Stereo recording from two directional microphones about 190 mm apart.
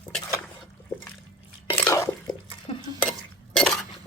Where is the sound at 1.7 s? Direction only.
10° left (ahead or behind).